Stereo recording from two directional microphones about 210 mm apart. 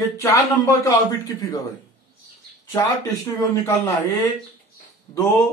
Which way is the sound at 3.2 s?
15° left (ahead or behind).